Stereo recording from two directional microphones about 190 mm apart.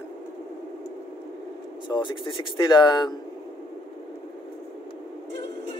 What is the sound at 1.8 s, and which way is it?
Speech, 25° left (ahead or behind).